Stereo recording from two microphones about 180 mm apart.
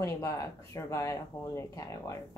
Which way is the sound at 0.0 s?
15° left (ahead or behind).